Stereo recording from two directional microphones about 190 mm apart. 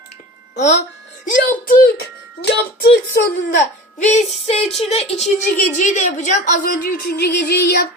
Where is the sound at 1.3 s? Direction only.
50° left (ahead or behind).